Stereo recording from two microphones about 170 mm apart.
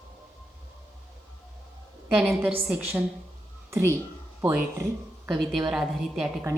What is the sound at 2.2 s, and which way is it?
Speech, 10° right (ahead or behind).